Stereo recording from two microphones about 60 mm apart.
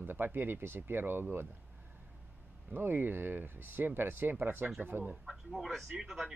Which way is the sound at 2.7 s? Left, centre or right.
Right.